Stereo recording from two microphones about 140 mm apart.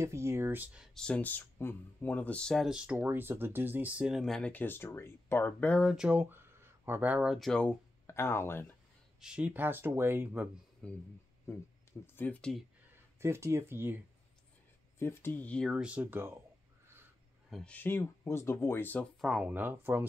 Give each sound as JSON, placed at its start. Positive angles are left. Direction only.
{"t": 0.0, "sound": "speech", "side_deg": -20}
{"t": 0.9, "sound": "speech", "side_deg": 5}
{"t": 5.9, "sound": "speech", "side_deg": -5}
{"t": 8.1, "sound": "speech", "side_deg": 20}
{"t": 9.2, "sound": "speech", "side_deg": -10}
{"t": 10.8, "sound": "speech", "side_deg": 5}
{"t": 12.2, "sound": "speech", "side_deg": 10}
{"t": 13.2, "sound": "speech", "side_deg": -20}
{"t": 15.0, "sound": "speech", "side_deg": 15}
{"t": 15.7, "sound": "speech", "side_deg": -5}
{"t": 17.5, "sound": "speech", "side_deg": 0}
{"t": 17.7, "sound": "speech", "side_deg": 15}
{"t": 19.2, "sound": "speech", "side_deg": -5}